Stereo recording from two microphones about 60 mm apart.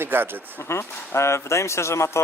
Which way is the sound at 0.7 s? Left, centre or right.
Left.